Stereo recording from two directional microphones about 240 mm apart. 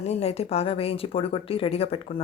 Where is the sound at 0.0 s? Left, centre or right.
Left.